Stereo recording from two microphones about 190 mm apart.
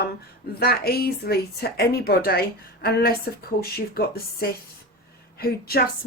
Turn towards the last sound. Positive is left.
turn(degrees=55)  # may be behind; listen again after turning